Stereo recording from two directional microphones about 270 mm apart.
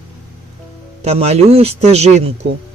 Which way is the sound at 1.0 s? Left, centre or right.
Right.